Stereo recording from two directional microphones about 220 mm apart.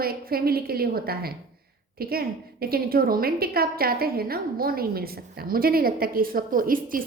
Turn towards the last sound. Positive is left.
turn(degrees=-40)  # may be behind; listen again after turning